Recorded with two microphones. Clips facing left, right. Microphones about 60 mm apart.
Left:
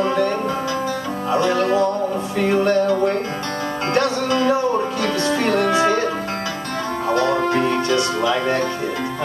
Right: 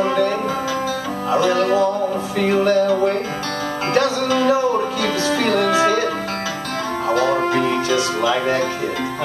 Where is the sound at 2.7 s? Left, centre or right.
Left.